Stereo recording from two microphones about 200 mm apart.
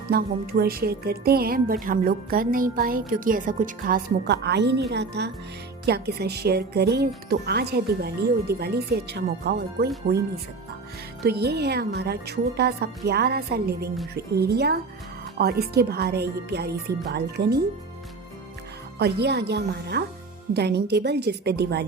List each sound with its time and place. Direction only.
0.1 s a woman's voice: 50° right (ahead or behind)
11.2 s a woman's voice: 55° right (ahead or behind)
18.9 s speech: 55° right (ahead or behind)